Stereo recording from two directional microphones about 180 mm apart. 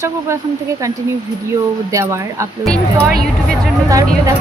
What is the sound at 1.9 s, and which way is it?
Speech, 15° right (ahead or behind).